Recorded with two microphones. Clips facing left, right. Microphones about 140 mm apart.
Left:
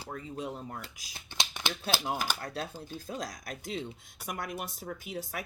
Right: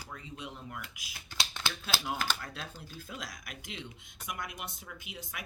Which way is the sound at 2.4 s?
40° left (ahead or behind).